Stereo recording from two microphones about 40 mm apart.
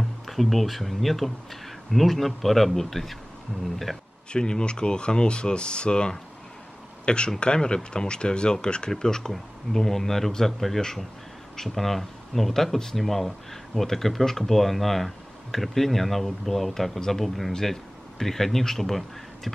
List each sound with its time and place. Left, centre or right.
0.3 s speech: centre
4.3 s speech: left; by 19.5 s centre